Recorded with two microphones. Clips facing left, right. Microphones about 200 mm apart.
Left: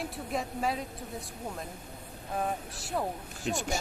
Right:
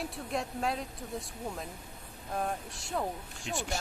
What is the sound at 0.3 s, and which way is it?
Speech, centre (ahead or behind).